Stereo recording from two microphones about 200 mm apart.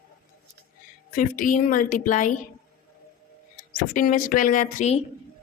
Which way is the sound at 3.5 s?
40° left (ahead or behind).